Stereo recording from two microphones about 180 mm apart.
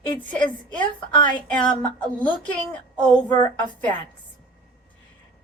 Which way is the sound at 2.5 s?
5° left (ahead or behind).